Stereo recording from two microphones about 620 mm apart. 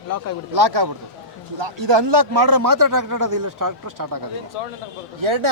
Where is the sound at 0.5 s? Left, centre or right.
Right.